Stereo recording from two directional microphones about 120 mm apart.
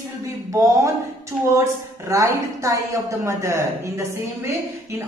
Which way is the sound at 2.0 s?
25° right (ahead or behind).